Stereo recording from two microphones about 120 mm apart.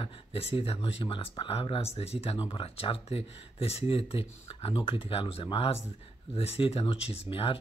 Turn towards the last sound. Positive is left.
turn(degrees=50)  # may be behind; listen again after turning